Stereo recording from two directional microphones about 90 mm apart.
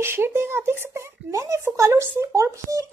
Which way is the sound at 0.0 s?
25° right (ahead or behind).